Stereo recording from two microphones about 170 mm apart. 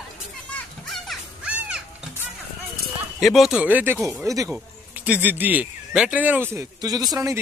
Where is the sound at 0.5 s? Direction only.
Centre (ahead or behind).